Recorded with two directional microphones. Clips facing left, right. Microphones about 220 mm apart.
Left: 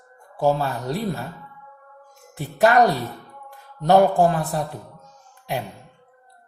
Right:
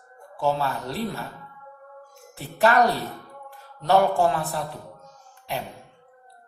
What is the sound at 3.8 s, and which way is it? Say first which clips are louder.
Speech: left 4 dB; 45° left (ahead or behind).